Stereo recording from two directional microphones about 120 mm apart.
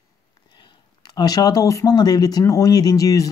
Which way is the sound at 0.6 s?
35° left (ahead or behind).